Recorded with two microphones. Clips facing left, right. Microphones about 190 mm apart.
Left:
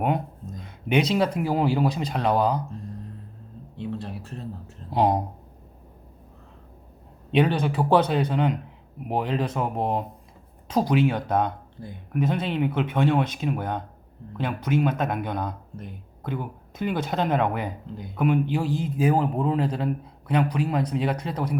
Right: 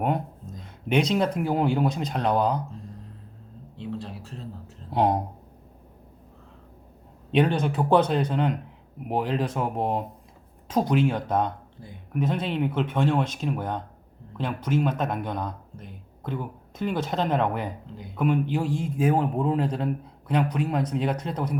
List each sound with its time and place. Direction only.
0.9 s speech: 5° left (ahead or behind)
3.8 s a sound: 60° left (ahead or behind)
4.9 s speech: 10° left (ahead or behind)
7.3 s speech: 5° left (ahead or behind)